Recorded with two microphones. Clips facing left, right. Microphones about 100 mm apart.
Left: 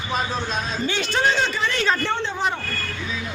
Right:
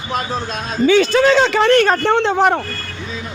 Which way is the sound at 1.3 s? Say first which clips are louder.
Right 10 dB; 90° right.